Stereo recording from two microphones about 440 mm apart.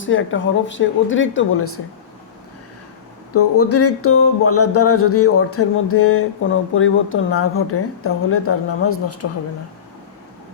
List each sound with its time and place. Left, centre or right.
0.0 s a woman's voice: left
3.3 s a woman's voice: left